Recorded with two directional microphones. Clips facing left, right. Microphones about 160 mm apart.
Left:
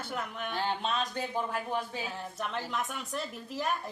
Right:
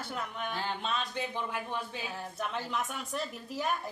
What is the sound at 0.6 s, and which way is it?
Speech, 40° left (ahead or behind).